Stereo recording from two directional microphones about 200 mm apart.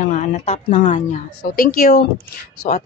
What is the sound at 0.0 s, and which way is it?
Speech, 40° left (ahead or behind).